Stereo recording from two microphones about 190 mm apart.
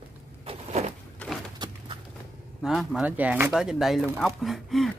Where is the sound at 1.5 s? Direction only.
20° right (ahead or behind).